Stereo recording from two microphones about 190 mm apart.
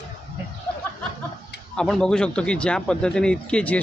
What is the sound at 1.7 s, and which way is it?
A man's voice, 5° left (ahead or behind).